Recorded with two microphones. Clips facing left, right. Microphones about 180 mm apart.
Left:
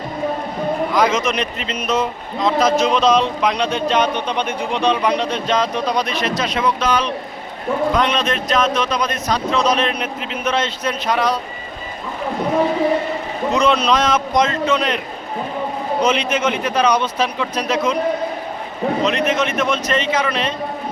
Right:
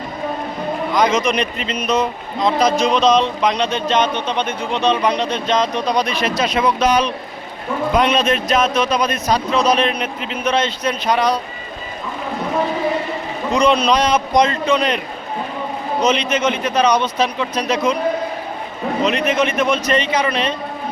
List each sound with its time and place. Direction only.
0.9 s a man's voice: 5° left (ahead or behind)
13.5 s speech: centre (ahead or behind)
16.0 s speech: 10° left (ahead or behind)
19.0 s speech: centre (ahead or behind)